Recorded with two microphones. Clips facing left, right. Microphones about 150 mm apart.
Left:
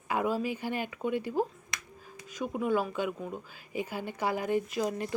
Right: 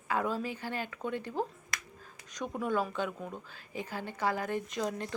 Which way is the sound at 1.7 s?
20° left (ahead or behind).